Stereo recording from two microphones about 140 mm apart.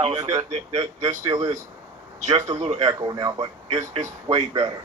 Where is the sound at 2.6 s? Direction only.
50° right (ahead or behind).